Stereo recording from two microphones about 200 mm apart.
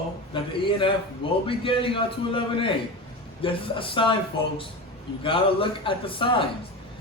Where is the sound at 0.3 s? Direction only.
25° left (ahead or behind).